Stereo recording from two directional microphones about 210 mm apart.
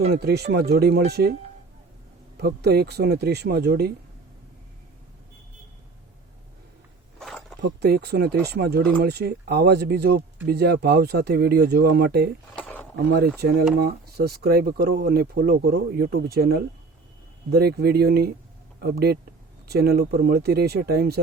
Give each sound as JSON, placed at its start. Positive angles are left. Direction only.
{"t": 0.1, "sound": "speech", "side_deg": -50}
{"t": 2.4, "sound": "speech", "side_deg": -50}
{"t": 7.2, "sound": "a sound", "side_deg": 0}
{"t": 7.6, "sound": "speech", "side_deg": -50}
{"t": 12.5, "sound": "speech", "side_deg": 5}
{"t": 13.1, "sound": "speech", "side_deg": -50}